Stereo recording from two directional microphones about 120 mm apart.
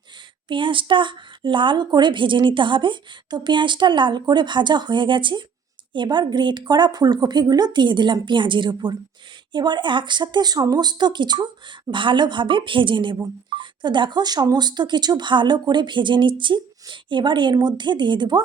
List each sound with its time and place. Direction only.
0.4 s a woman's voice: 45° right (ahead or behind)